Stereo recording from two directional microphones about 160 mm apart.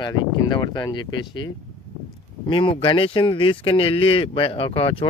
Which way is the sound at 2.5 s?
30° left (ahead or behind).